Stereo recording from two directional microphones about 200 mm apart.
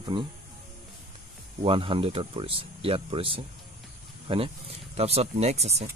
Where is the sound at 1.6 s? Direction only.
25° right (ahead or behind).